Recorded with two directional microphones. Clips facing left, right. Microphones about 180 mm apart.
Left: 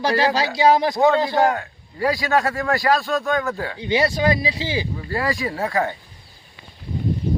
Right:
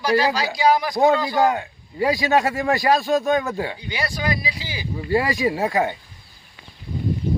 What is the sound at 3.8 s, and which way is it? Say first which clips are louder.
Speech: left 8 dB; 25° left (ahead or behind).